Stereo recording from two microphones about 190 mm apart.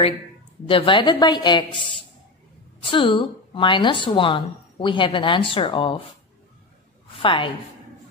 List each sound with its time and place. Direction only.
0.7 s a woman's voice: 25° left (ahead or behind)
2.8 s a woman's voice: 25° left (ahead or behind)
7.2 s a woman's voice: 25° left (ahead or behind)